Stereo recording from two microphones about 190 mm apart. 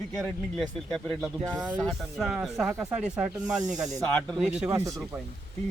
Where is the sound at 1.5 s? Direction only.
20° right (ahead or behind).